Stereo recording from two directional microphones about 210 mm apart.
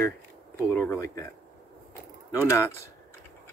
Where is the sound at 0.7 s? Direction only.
10° left (ahead or behind).